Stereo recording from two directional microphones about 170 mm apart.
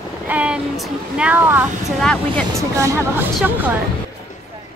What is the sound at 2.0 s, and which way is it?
Speech, 5° left (ahead or behind).